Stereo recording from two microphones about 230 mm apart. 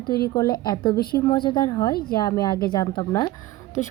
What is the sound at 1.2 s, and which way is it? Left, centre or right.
A woman's voice, centre.